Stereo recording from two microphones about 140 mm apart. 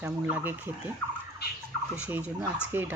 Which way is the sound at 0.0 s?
15° right (ahead or behind).